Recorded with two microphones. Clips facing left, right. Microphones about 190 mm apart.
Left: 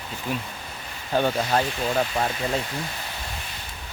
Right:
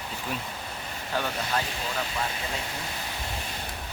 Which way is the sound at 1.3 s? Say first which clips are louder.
Left 7 dB; 45° left (ahead or behind).